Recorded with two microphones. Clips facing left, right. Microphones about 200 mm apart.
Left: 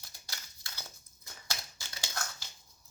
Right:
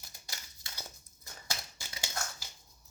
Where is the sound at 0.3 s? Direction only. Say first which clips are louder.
Even; 20° right (ahead or behind).